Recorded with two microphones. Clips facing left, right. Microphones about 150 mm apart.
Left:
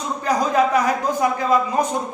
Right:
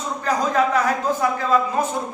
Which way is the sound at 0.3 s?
15° left (ahead or behind).